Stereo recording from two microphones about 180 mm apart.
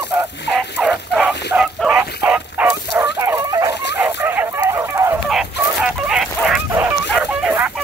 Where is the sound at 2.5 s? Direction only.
10° right (ahead or behind).